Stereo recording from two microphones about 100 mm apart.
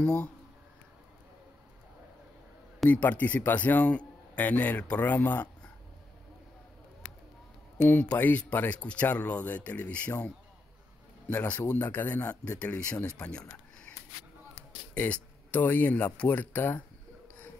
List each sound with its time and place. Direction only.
0.0 s a man's voice: 10° left (ahead or behind)
2.9 s a man's voice: 15° left (ahead or behind)
7.8 s a man's voice: 15° left (ahead or behind)
11.2 s a man's voice: 15° left (ahead or behind)
15.0 s speech: 15° left (ahead or behind)